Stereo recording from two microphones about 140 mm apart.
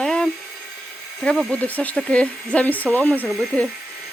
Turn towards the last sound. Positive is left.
turn(degrees=0)  # may be behind; listen again after turning